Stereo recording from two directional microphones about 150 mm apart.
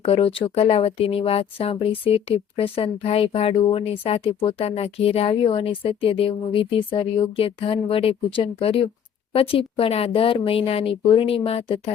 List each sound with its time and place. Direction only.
0.0 s speech: 40° left (ahead or behind)